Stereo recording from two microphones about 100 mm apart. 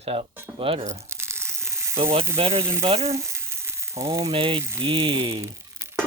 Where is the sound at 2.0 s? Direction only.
65° right (ahead or behind).